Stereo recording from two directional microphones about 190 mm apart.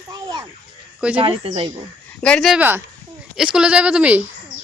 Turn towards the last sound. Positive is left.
turn(degrees=-5)  # may be behind; listen again after turning